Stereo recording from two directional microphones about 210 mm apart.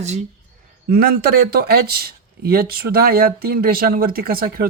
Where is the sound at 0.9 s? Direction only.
50° right (ahead or behind).